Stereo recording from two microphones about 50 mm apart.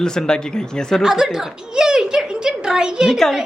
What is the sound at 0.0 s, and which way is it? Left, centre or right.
Speech, centre.